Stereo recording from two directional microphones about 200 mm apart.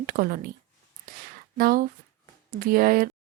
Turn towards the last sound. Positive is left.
turn(degrees=-45)  # may be behind; listen again after turning